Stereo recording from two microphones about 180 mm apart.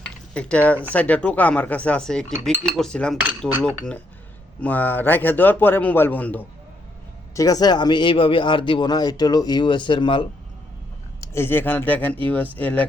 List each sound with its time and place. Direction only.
0.0 s cutlery: 5° left (ahead or behind)
0.9 s a man's voice: 10° left (ahead or behind)
2.4 s cutlery: centre (ahead or behind)
4.6 s a man's voice: 10° left (ahead or behind)
7.3 s speech: 20° left (ahead or behind)
11.2 s a man's voice: 15° left (ahead or behind)